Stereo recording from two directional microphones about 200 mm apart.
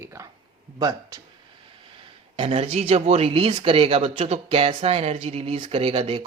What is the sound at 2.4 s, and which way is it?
Speech, 30° right (ahead or behind).